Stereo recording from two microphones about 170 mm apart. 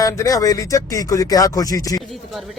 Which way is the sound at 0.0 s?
20° left (ahead or behind).